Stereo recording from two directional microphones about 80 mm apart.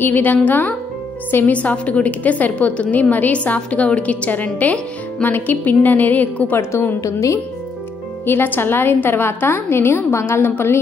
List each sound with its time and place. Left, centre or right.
0.0 s a woman's voice: left
8.3 s a woman's voice: left